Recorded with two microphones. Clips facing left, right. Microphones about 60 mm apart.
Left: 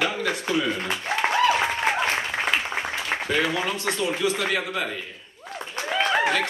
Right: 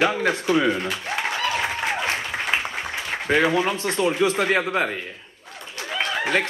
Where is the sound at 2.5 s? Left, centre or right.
Centre.